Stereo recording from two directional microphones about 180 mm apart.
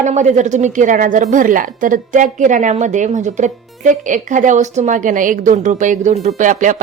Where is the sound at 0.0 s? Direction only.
40° right (ahead or behind).